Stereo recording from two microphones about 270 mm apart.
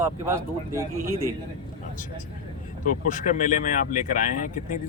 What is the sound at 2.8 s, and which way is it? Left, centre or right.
Speech, left.